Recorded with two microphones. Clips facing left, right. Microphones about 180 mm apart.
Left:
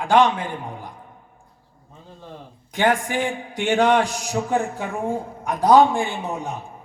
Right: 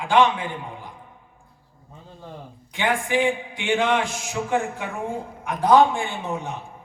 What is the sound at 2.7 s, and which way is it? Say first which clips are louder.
A man's voice: left 2 dB; 45° left (ahead or behind).